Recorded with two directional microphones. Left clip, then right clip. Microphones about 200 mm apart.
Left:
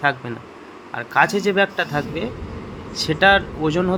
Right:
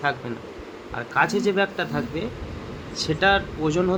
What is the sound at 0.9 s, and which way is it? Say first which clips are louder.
Speech: left 4 dB; 25° left (ahead or behind).